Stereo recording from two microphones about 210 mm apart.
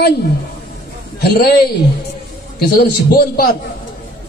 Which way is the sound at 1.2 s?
50° left (ahead or behind).